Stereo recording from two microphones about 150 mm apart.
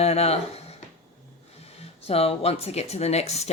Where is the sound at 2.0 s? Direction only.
40° left (ahead or behind).